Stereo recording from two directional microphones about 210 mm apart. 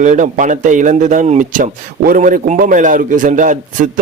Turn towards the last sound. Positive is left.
turn(degrees=-40)  # may be behind; listen again after turning